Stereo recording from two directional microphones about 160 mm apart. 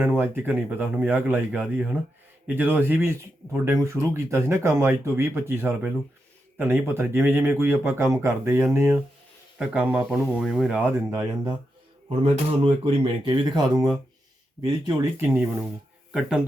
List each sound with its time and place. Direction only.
0.0 s speech: 15° right (ahead or behind)
12.0 s speech: 35° right (ahead or behind)
14.6 s speech: 25° right (ahead or behind)
15.2 s speech: 15° right (ahead or behind)